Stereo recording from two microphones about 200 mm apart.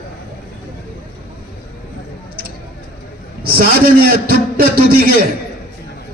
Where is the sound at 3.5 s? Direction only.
50° right (ahead or behind).